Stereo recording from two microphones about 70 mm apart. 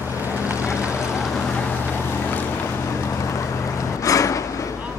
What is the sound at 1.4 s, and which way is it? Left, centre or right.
Vehicle, left.